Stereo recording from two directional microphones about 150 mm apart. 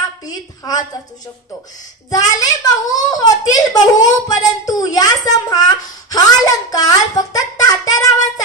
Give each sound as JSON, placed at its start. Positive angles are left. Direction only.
{"t": 2.0, "sound": "a child's voice", "side_deg": 25}